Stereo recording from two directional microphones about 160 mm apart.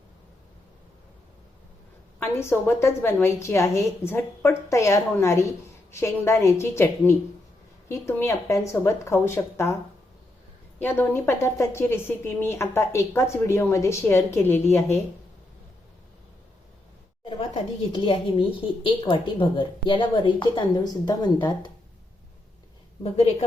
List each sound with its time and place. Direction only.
2.1 s a woman's voice: 15° left (ahead or behind)
10.8 s a woman's voice: 10° left (ahead or behind)
17.9 s a woman's voice: 30° left (ahead or behind)